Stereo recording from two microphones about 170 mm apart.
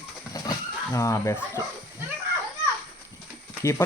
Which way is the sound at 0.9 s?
20° left (ahead or behind).